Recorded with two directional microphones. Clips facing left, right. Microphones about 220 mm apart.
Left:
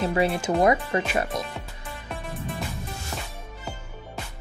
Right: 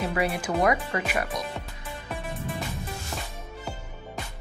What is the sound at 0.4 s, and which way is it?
Speech, 25° left (ahead or behind).